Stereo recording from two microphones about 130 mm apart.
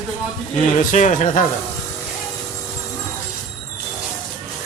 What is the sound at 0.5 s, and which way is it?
Speech, 70° left (ahead or behind).